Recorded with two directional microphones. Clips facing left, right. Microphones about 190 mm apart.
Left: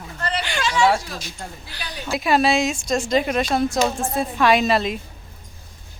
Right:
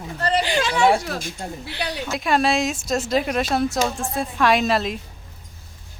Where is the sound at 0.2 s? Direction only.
35° right (ahead or behind).